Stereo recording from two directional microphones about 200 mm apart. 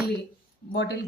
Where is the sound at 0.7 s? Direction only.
60° left (ahead or behind).